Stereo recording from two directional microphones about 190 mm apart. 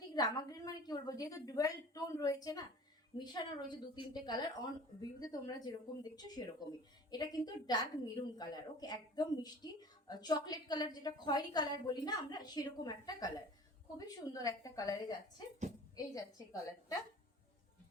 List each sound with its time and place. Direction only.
0.1 s a woman's voice: 20° left (ahead or behind)
16.1 s a woman's voice: 20° left (ahead or behind)